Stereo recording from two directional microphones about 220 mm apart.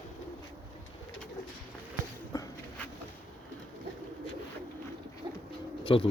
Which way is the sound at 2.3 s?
15° left (ahead or behind).